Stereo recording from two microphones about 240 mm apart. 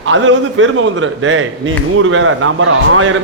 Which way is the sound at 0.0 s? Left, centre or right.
Right.